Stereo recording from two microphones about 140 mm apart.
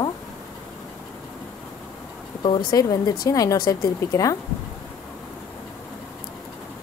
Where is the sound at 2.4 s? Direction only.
35° left (ahead or behind).